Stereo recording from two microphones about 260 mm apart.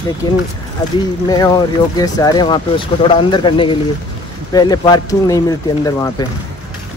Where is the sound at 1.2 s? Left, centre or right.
Centre.